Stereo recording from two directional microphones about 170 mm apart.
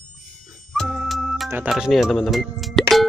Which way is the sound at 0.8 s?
Centre (ahead or behind).